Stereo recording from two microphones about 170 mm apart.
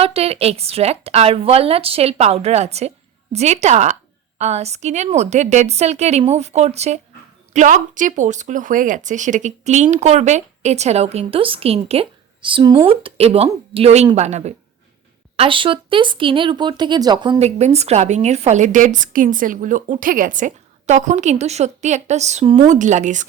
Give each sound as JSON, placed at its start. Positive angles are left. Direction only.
{"t": 0.0, "sound": "speech", "side_deg": -35}
{"t": 15.4, "sound": "speech", "side_deg": -30}
{"t": 17.4, "sound": "a woman's voice", "side_deg": -40}